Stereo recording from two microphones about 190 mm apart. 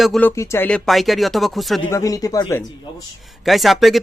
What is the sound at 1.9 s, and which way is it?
Speech, 15° left (ahead or behind).